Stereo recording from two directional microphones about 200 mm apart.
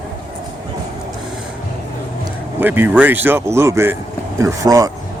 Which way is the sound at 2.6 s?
10° right (ahead or behind).